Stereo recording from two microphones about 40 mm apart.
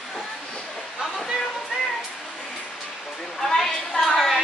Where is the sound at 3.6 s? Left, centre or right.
Centre.